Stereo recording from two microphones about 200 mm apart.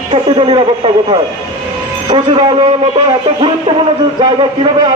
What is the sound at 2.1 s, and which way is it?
Speech, 25° right (ahead or behind).